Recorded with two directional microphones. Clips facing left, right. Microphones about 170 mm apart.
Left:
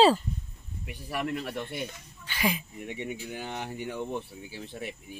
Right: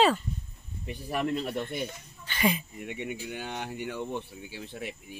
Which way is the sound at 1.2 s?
25° right (ahead or behind).